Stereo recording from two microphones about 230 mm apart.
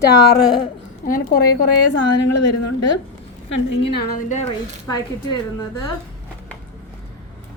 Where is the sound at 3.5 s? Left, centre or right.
Left.